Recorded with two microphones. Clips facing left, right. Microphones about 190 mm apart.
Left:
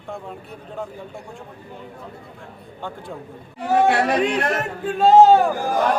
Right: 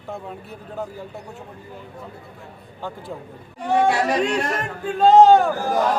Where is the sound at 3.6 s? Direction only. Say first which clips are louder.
Left 1 dB; 5° left (ahead or behind).